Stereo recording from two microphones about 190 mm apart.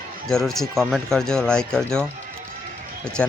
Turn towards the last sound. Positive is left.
turn(degrees=5)  # may be behind; listen again after turning